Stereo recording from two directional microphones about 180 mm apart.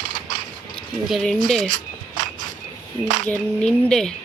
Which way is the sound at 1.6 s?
45° right (ahead or behind).